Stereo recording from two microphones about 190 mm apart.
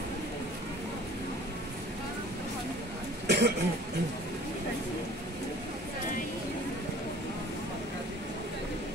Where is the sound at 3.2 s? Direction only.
60° right (ahead or behind).